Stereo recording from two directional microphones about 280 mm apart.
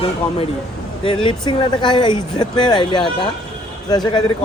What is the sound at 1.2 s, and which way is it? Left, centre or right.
Speech, centre.